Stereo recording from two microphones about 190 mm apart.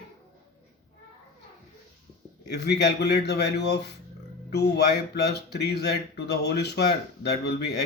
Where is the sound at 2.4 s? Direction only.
60° left (ahead or behind).